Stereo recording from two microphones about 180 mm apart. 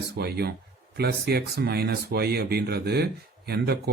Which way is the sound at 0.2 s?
60° right (ahead or behind).